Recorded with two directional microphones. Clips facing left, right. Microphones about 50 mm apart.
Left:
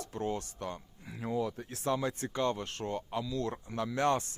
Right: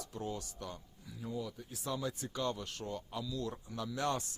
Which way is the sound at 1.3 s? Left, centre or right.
Left.